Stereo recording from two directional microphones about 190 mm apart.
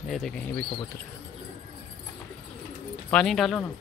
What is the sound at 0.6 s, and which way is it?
Speech, 25° left (ahead or behind).